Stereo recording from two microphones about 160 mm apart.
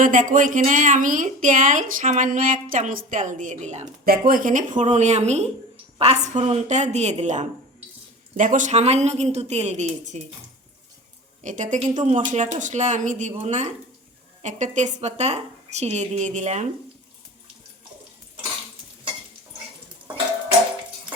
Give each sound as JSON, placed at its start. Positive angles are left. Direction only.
{"t": 0.0, "sound": "speech", "side_deg": -55}
{"t": 4.3, "sound": "speech", "side_deg": -60}
{"t": 11.4, "sound": "speech", "side_deg": -50}